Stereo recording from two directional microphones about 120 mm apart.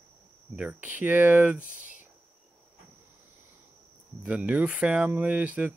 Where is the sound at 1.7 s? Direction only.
90° right.